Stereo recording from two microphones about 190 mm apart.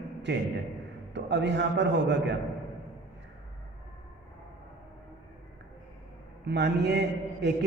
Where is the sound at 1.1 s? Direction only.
70° right (ahead or behind).